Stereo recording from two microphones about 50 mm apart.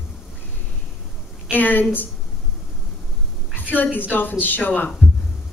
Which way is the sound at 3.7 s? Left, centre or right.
Left.